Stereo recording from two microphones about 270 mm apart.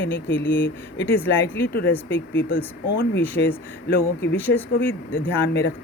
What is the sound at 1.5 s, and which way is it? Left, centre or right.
Speech, left.